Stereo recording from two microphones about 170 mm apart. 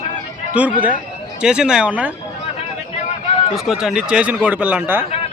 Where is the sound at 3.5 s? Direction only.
Centre (ahead or behind).